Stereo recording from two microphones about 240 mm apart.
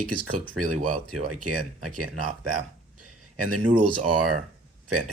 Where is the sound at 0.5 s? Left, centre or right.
Right.